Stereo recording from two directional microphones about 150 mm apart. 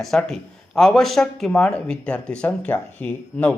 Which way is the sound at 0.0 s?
5° left (ahead or behind).